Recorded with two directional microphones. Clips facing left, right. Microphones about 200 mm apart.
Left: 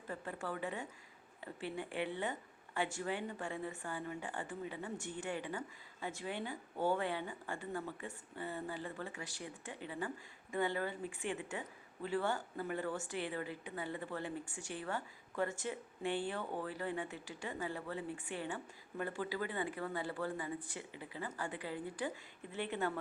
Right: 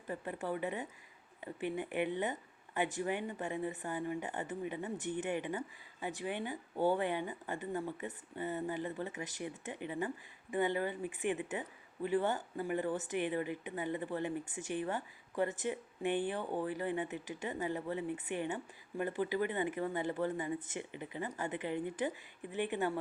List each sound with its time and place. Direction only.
0.1 s a woman's voice: 15° right (ahead or behind)